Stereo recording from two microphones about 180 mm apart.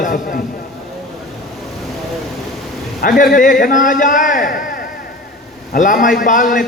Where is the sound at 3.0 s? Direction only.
55° left (ahead or behind).